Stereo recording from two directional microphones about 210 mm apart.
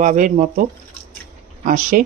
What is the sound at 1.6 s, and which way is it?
Speech, 40° right (ahead or behind).